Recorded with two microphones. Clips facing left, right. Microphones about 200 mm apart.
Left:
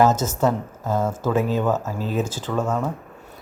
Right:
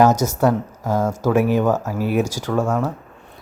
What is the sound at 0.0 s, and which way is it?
Speech, 15° right (ahead or behind).